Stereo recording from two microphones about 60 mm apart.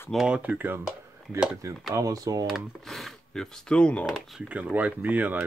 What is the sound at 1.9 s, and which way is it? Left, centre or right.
Speech, right.